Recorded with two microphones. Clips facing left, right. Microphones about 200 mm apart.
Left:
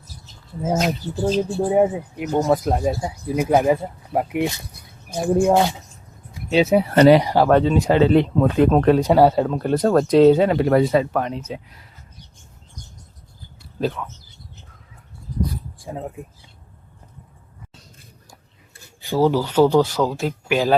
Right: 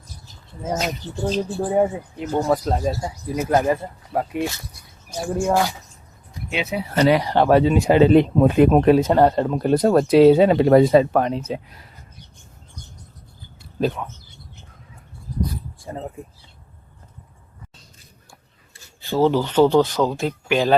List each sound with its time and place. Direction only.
0.6 s speech: 5° left (ahead or behind)
4.7 s a sound: 55° left (ahead or behind)
5.5 s speech: 25° left (ahead or behind)
6.5 s speech: 40° left (ahead or behind)
6.7 s speech: 55° left (ahead or behind)
7.3 s speech: 5° left (ahead or behind)
7.5 s speech: 10° right (ahead or behind)
9.0 s speech: 5° left (ahead or behind)
9.5 s speech: 15° right (ahead or behind); by 11.6 s 35° right (ahead or behind)
13.6 s a sound: 20° right (ahead or behind)
15.8 s speech: 5° left (ahead or behind)
19.0 s speech: 10° left (ahead or behind)